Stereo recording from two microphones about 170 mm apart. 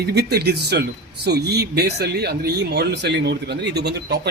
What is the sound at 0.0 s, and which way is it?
A man's voice, 70° right (ahead or behind).